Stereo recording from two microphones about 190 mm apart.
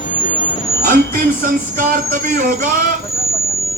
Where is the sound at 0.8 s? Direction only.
45° right (ahead or behind).